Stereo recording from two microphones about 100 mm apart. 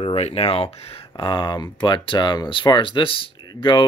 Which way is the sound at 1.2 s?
50° left (ahead or behind).